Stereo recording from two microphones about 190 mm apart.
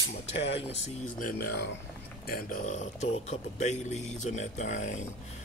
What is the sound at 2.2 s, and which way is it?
A man's voice, 50° left (ahead or behind).